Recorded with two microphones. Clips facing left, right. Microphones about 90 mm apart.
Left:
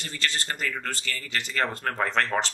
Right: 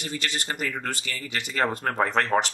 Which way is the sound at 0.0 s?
15° right (ahead or behind).